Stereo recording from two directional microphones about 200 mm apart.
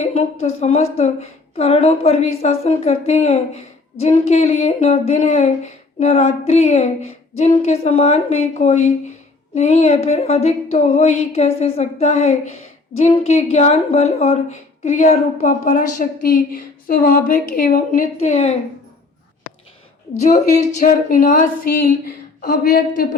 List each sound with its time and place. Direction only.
0.0 s a sound: 30° left (ahead or behind)
0.4 s a woman's voice: 35° left (ahead or behind)
20.2 s a woman's voice: 35° left (ahead or behind)